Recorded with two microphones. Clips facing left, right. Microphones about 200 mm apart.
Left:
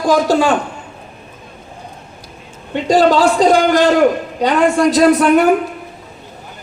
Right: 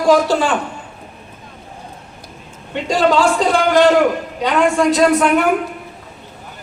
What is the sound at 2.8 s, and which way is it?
A man's voice, 35° left (ahead or behind).